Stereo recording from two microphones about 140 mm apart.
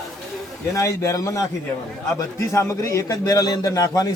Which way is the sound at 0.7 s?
20° left (ahead or behind).